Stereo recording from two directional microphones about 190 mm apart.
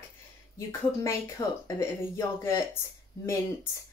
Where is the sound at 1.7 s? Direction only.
15° left (ahead or behind).